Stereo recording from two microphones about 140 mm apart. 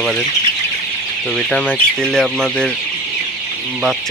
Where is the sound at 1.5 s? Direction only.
5° left (ahead or behind).